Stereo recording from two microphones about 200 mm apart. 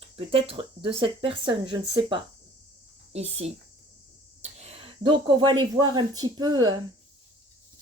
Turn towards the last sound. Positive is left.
turn(degrees=-20)  # may be behind; listen again after turning